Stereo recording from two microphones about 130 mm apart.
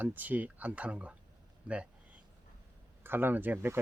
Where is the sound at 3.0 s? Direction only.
15° right (ahead or behind).